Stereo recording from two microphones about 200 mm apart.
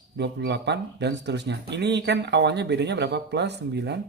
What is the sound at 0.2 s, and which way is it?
Speech, 60° right (ahead or behind).